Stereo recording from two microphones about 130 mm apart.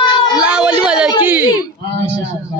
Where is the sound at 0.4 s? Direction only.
10° right (ahead or behind).